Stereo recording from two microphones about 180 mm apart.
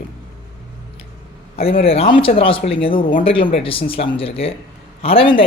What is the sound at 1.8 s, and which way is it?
Speech, 35° left (ahead or behind).